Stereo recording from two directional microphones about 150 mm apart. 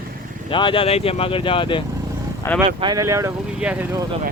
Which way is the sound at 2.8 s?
20° right (ahead or behind).